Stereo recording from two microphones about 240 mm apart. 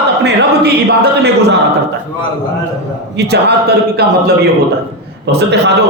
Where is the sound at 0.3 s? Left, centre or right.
Right.